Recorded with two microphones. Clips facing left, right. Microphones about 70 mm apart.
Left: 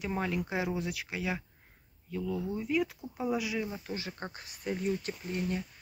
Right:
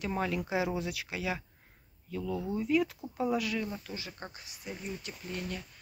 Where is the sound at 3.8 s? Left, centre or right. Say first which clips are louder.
Left 4 dB; left.